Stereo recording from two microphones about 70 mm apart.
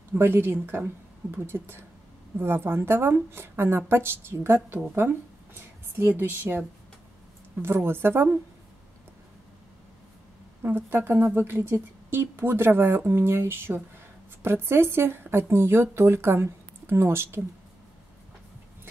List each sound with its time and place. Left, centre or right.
0.1 s speech: right
7.6 s speech: right
10.6 s speech: right